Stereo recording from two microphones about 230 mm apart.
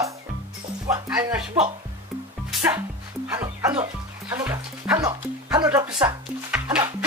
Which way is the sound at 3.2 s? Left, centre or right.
Centre.